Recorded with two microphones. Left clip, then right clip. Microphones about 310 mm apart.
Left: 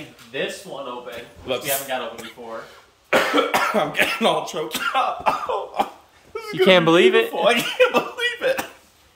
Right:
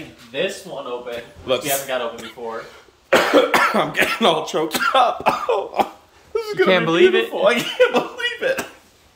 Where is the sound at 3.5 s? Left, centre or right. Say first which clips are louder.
Right 3 dB; centre; by 5.8 s right.